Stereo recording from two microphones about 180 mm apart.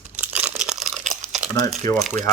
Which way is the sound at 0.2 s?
5° right (ahead or behind).